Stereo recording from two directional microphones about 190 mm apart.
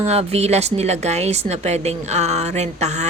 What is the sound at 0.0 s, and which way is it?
Speech, 35° right (ahead or behind).